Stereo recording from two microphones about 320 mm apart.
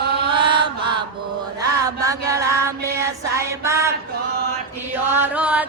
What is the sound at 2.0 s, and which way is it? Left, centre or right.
Chant, centre.